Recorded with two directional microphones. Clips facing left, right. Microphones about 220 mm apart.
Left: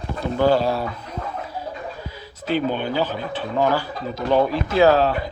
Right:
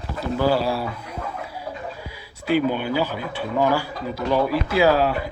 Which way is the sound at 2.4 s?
10° right (ahead or behind).